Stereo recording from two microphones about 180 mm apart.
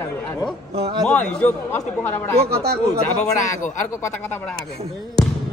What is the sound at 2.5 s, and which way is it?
Speech, 60° right (ahead or behind).